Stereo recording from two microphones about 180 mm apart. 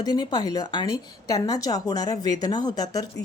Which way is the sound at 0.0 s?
20° left (ahead or behind).